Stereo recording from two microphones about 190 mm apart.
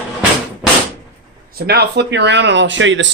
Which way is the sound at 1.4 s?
55° right (ahead or behind).